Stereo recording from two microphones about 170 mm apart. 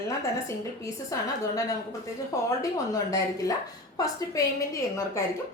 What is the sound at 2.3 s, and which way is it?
A woman's voice, 20° left (ahead or behind).